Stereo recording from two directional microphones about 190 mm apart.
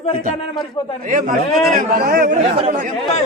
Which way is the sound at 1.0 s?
45° right (ahead or behind).